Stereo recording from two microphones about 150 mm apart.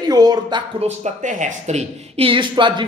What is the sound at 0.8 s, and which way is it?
Speech, 50° right (ahead or behind).